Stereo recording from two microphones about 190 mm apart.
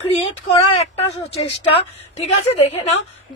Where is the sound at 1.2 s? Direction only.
30° left (ahead or behind).